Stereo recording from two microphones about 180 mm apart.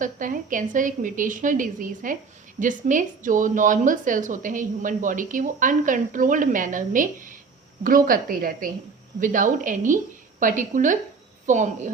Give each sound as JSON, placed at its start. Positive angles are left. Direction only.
{"t": 0.0, "sound": "speech", "side_deg": -45}